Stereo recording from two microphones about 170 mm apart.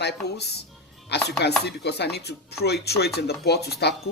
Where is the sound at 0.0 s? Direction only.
75° left (ahead or behind).